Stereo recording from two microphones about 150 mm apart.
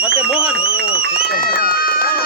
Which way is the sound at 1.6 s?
80° left.